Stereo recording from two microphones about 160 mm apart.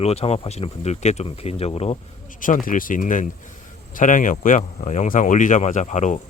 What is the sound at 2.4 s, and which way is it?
Speech, 55° left (ahead or behind).